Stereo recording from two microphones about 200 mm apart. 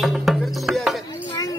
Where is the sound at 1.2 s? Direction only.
15° left (ahead or behind).